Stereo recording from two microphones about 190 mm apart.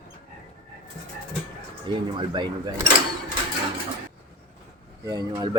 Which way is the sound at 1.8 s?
25° right (ahead or behind).